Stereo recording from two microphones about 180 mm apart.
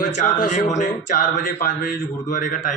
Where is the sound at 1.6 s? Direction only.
50° left (ahead or behind).